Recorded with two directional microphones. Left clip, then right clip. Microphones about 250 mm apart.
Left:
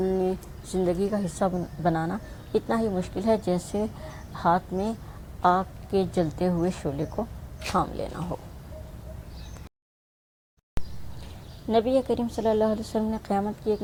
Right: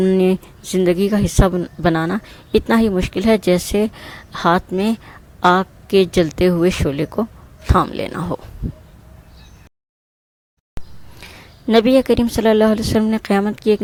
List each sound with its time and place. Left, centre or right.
0.0 s speech: right
11.7 s speech: right